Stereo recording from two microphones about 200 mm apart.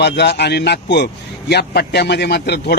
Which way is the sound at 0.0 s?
55° left (ahead or behind).